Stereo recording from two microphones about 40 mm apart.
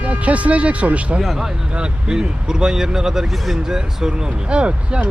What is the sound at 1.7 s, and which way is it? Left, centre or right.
Speech, right.